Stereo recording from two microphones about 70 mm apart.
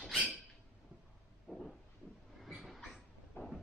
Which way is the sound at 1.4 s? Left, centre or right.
Centre.